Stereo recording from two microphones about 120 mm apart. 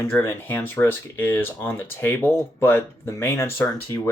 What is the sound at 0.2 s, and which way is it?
Speech, 20° left (ahead or behind).